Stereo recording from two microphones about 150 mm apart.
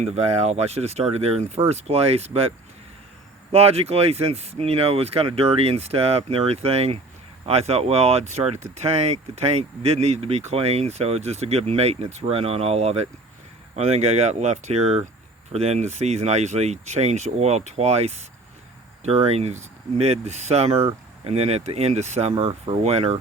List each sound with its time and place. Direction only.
0.0 s speech: 45° right (ahead or behind)
3.5 s speech: 40° right (ahead or behind)